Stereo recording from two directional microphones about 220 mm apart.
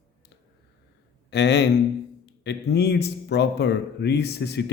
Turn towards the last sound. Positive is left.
turn(degrees=50)  # may be behind; listen again after turning